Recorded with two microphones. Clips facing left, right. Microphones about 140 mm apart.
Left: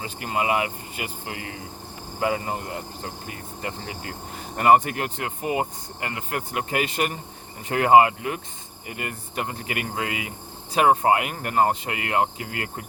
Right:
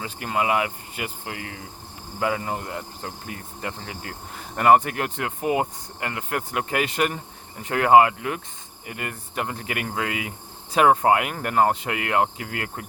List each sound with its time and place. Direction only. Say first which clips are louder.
0.0 s speech: right 1 dB; 55° right (ahead or behind)
2.6 s speech: even; 50° right (ahead or behind)
4.5 s speech: even; 5° left (ahead or behind)
4.8 s speech: right 1 dB; 60° right (ahead or behind)
5.4 s speech: right 2 dB; centre (ahead or behind)
6.0 s speech: right 2 dB; 55° right (ahead or behind)